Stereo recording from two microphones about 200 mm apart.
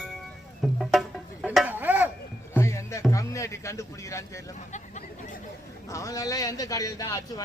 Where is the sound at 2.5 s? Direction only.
15° left (ahead or behind).